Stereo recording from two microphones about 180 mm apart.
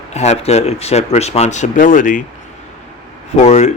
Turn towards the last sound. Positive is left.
turn(degrees=40)  # may be behind; listen again after turning